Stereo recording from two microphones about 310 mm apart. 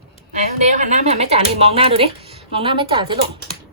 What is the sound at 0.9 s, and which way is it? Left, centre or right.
Speech, right.